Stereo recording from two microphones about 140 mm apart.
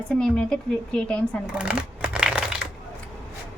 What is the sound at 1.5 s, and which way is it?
Crumpling, 10° right (ahead or behind).